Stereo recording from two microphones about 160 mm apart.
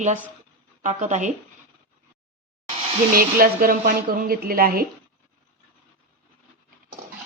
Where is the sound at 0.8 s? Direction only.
50° right (ahead or behind).